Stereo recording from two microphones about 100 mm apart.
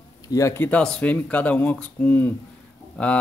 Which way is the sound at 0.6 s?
10° left (ahead or behind).